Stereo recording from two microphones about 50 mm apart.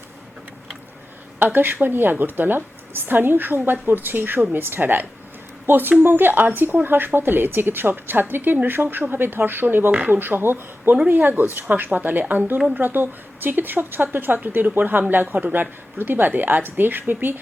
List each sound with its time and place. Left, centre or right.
1.4 s a woman's voice: right
11.1 s speech: right
16.0 s speech: right